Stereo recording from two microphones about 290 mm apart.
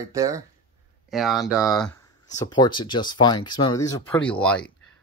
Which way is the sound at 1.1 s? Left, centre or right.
Centre.